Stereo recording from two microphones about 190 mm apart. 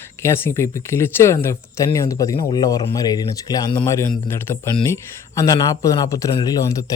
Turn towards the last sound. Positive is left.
turn(degrees=15)  # may be behind; listen again after turning